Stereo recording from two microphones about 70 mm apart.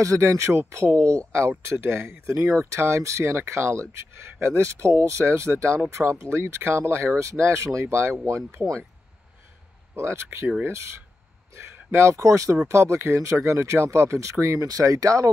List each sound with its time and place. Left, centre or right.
0.0 s speech: right
9.9 s speech: right